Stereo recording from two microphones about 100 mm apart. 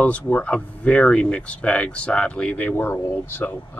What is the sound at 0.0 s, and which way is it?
Speech, 15° left (ahead or behind).